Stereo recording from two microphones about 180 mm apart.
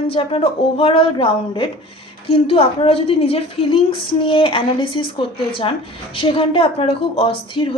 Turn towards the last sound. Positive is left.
turn(degrees=30)  # may be behind; listen again after turning